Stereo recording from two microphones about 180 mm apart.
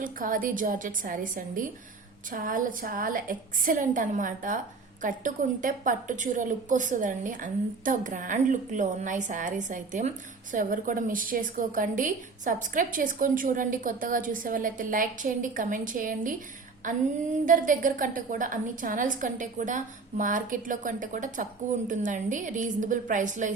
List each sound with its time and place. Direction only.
0.0 s a woman's voice: 50° right (ahead or behind)